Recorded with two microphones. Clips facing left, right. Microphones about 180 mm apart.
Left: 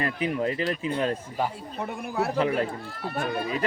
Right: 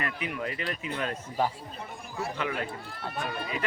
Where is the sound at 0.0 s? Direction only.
35° left (ahead or behind).